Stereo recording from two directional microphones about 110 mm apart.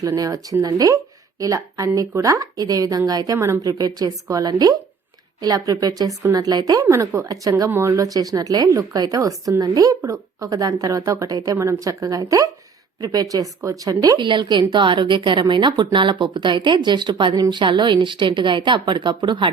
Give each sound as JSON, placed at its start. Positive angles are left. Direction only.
{"t": 0.0, "sound": "a woman's voice", "side_deg": -30}
{"t": 6.8, "sound": "a woman's voice", "side_deg": -25}
{"t": 14.2, "sound": "a woman's voice", "side_deg": -45}